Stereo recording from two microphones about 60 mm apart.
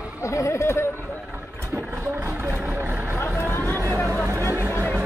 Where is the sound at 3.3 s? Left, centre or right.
Left.